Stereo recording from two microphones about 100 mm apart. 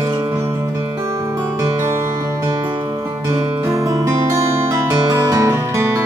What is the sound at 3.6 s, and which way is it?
Music, 35° right (ahead or behind).